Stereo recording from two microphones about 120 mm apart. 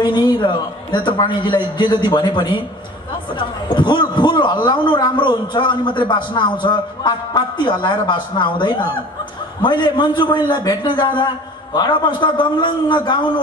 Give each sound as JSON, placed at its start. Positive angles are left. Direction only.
{"t": 0.0, "sound": "a man's voice", "side_deg": 40}